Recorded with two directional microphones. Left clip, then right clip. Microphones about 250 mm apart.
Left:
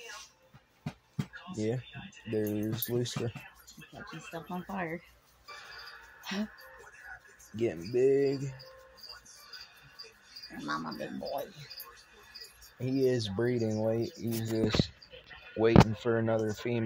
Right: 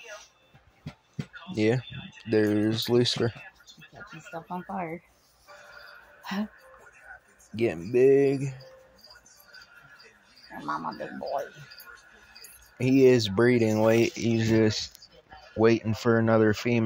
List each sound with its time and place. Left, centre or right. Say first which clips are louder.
2.2 s speech: right 9 dB; centre
4.4 s speech: right 4 dB; centre
7.5 s speech: right 6 dB; centre
10.6 s speech: right 4 dB; centre
12.7 s speech: right 10 dB; right